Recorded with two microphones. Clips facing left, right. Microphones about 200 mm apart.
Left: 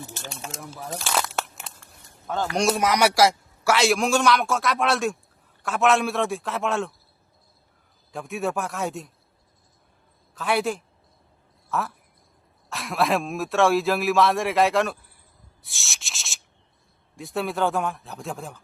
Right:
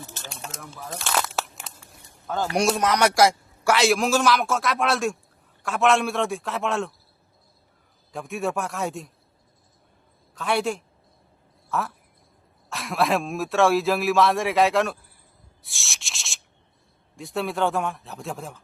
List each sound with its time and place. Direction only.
0.3 s a sound: centre (ahead or behind)
2.2 s a man's voice: centre (ahead or behind)
8.1 s speech: centre (ahead or behind)
10.3 s speech: centre (ahead or behind)
15.6 s rub: centre (ahead or behind)
17.2 s speech: centre (ahead or behind)